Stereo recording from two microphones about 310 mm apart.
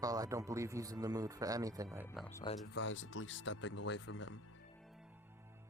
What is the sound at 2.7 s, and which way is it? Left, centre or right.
Speech, left.